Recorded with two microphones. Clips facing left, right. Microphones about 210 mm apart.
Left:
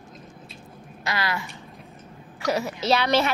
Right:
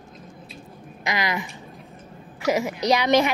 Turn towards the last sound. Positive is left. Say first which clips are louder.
# right 2 dB
turn(degrees=-15)  # may be behind; listen again after turning